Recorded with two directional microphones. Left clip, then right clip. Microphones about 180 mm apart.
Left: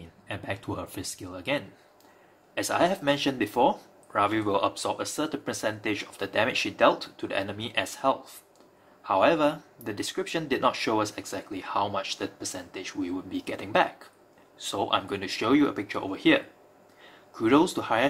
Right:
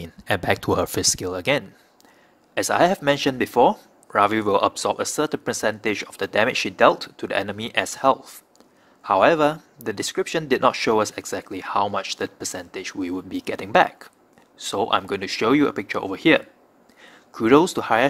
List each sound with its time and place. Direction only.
0.3 s speech: 55° right (ahead or behind)